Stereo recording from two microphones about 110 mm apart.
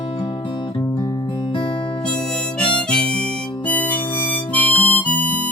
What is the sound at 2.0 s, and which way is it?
Harmonica, 5° left (ahead or behind).